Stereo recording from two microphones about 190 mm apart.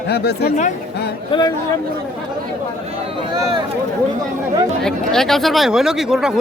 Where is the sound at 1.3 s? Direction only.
20° left (ahead or behind).